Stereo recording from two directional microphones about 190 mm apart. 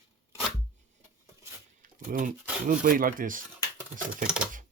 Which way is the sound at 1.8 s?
45° right (ahead or behind).